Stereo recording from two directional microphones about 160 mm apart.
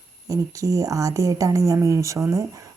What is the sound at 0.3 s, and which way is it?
Speech, 20° right (ahead or behind).